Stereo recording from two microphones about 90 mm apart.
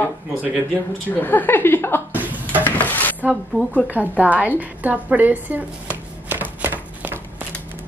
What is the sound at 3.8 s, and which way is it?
Speech, 20° right (ahead or behind).